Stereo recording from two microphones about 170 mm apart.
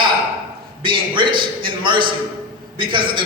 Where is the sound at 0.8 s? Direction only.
30° right (ahead or behind).